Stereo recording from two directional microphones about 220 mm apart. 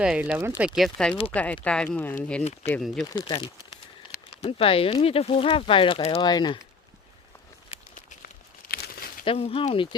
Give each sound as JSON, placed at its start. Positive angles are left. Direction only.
{"t": 0.0, "sound": "speech", "side_deg": -5}
{"t": 3.1, "sound": "speech", "side_deg": 20}
{"t": 8.7, "sound": "crumpling", "side_deg": 45}
{"t": 9.2, "sound": "speech", "side_deg": 25}